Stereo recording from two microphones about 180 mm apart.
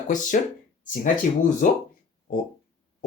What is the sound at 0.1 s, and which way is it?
Speech, 45° left (ahead or behind).